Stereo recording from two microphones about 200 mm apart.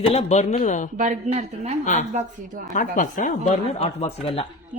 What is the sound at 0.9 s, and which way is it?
Speech, 35° right (ahead or behind).